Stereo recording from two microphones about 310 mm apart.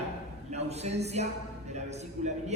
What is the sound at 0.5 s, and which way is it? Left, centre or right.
A man's voice, right.